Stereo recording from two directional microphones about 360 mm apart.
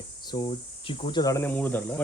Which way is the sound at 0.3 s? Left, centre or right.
Centre.